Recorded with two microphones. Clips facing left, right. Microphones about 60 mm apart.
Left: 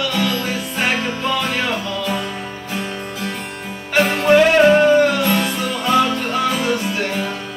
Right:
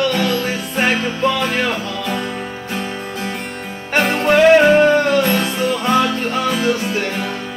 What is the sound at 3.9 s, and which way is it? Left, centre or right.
Music, right.